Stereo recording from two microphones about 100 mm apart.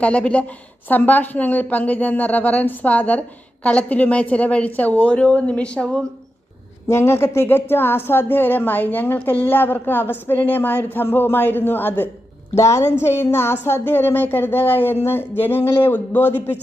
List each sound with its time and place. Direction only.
0.0 s a woman's voice: 10° left (ahead or behind)
6.8 s a woman's voice: 25° left (ahead or behind)